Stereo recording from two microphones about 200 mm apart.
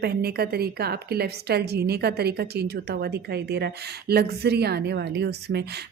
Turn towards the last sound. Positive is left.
turn(degrees=-55)  # may be behind; listen again after turning